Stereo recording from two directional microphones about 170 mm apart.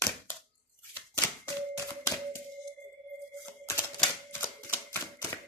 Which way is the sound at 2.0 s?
20° left (ahead or behind).